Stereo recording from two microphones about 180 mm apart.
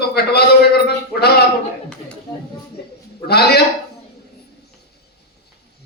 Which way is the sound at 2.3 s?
25° left (ahead or behind).